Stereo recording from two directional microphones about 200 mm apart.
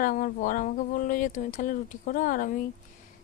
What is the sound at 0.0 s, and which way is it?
A woman's voice, 40° left (ahead or behind).